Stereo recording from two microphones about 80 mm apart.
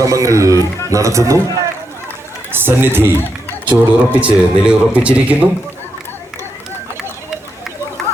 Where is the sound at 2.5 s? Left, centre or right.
Right.